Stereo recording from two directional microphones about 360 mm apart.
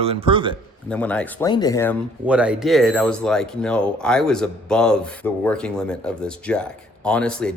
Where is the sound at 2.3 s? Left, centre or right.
Centre.